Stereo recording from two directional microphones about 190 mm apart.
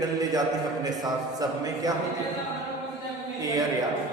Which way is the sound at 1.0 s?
20° right (ahead or behind).